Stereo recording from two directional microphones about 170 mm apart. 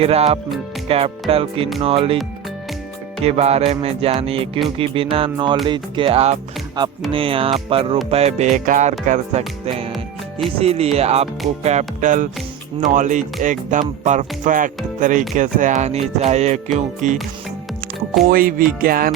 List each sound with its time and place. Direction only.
0.0 s speech: 35° right (ahead or behind)
3.2 s speech: 40° right (ahead or behind)
10.6 s speech: 35° right (ahead or behind)
18.3 s music: 55° right (ahead or behind)